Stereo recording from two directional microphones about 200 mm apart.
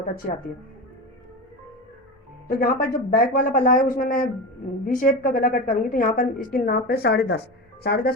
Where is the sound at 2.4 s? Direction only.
45° left (ahead or behind).